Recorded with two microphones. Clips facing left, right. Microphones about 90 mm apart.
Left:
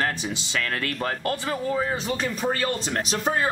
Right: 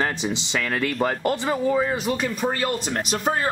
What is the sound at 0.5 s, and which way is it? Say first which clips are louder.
Speech: right 4 dB; 10° right (ahead or behind).